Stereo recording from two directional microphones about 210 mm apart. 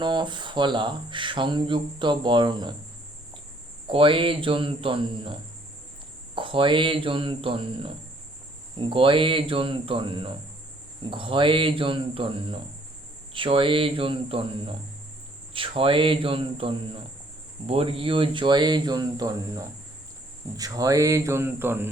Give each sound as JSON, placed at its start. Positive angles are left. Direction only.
{"t": 0.0, "sound": "speech", "side_deg": -20}
{"t": 3.8, "sound": "speech", "side_deg": -25}